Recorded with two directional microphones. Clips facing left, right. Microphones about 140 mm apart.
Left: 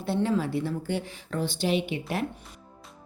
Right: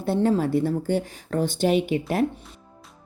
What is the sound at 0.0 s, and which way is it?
Speech, 45° right (ahead or behind).